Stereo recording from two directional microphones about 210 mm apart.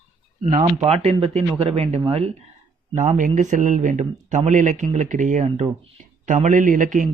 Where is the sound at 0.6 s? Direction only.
20° right (ahead or behind).